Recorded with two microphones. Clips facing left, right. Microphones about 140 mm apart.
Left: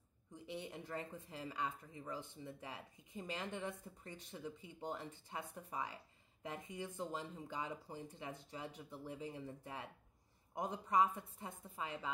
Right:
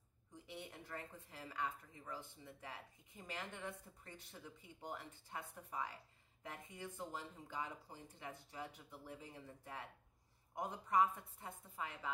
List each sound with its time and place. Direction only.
0.5 s speech: 20° left (ahead or behind)